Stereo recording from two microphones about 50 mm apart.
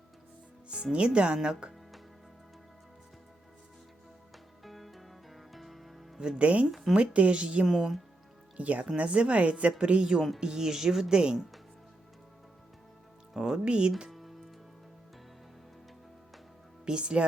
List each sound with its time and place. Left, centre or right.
0.9 s a woman's voice: right
4.6 s music: centre
6.1 s a woman's voice: centre
6.7 s speech: centre
6.9 s a woman's voice: right
7.7 s speech: centre
8.5 s a woman's voice: right
10.2 s speech: centre
10.4 s a woman's voice: centre
13.3 s a woman's voice: centre
14.1 s music: centre
16.8 s speech: centre